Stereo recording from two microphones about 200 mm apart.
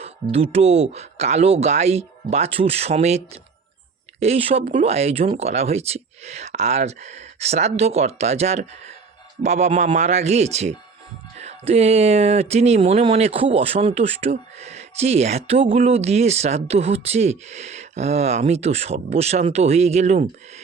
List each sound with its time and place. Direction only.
0.0 s speech: 30° right (ahead or behind)
4.2 s speech: 30° right (ahead or behind)